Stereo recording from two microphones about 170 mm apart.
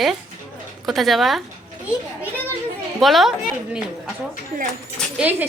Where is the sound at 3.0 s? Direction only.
Centre (ahead or behind).